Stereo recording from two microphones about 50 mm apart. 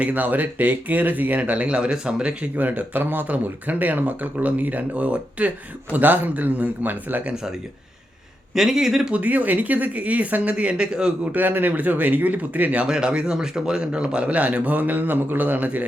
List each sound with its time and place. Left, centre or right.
0.0 s speech: right; by 2.5 s centre
2.6 s speech: right
8.5 s speech: centre
9.1 s speech: right
11.3 s speech: right
12.8 s speech: centre